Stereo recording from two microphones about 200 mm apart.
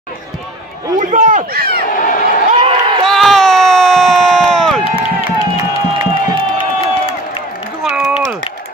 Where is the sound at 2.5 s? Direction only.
25° right (ahead or behind).